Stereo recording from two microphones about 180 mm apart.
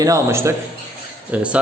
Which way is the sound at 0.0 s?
15° right (ahead or behind).